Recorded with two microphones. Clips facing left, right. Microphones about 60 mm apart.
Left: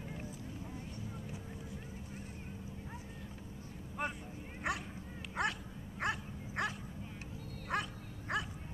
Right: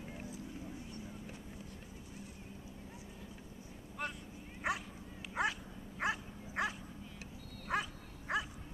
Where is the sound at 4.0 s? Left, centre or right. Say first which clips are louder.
Left 3 dB; centre.